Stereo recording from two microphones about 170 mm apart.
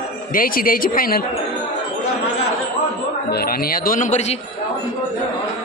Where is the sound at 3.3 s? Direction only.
65° left (ahead or behind); by 4.4 s 40° left (ahead or behind).